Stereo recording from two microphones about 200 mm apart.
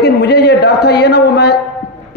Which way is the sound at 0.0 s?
55° left (ahead or behind).